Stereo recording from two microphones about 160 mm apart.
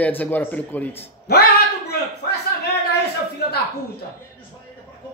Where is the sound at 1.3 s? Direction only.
90° left.